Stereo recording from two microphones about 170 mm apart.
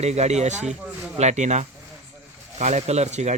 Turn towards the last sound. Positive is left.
turn(degrees=-40)  # may be behind; listen again after turning